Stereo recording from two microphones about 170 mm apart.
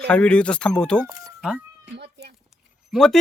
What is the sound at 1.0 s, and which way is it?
Chicken, 20° right (ahead or behind).